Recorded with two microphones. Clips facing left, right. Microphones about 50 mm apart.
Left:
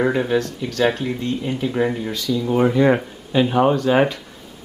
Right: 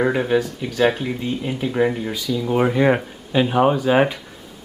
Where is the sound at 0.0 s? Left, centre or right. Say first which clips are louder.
Even; centre.